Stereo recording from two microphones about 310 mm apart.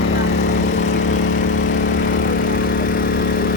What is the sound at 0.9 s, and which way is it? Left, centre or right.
Vehicle, left.